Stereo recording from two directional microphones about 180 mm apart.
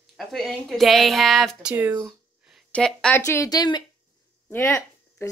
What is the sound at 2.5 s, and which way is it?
A woman's voice, centre (ahead or behind).